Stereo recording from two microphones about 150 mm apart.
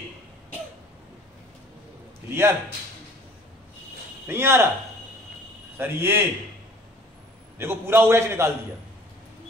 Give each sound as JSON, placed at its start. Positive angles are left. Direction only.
{"t": 2.2, "sound": "a man's voice", "side_deg": -15}
{"t": 4.3, "sound": "a man's voice", "side_deg": -15}
{"t": 5.8, "sound": "a man's voice", "side_deg": -15}
{"t": 7.5, "sound": "a man's voice", "side_deg": -15}